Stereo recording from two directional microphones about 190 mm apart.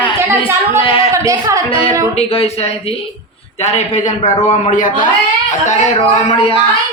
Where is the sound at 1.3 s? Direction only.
15° right (ahead or behind).